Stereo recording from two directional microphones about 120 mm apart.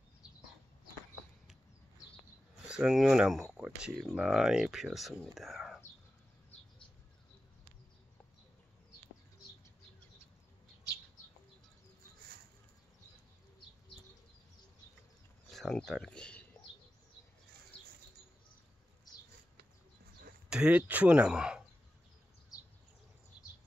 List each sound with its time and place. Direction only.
2.6 s speech: 5° right (ahead or behind)
15.5 s speech: 5° left (ahead or behind)
19.1 s a sound: 35° left (ahead or behind)
20.4 s speech: 10° right (ahead or behind)
22.5 s a sound: 30° left (ahead or behind)
23.3 s bird: 10° right (ahead or behind)